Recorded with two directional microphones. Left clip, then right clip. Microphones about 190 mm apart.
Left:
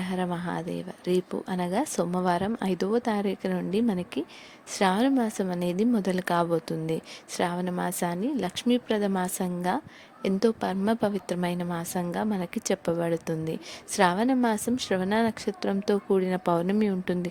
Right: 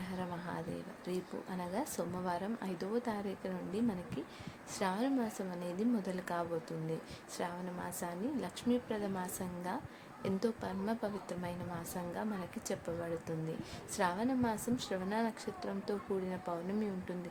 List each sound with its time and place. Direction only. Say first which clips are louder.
0.0 s a woman's voice: left 12 dB; 45° left (ahead or behind)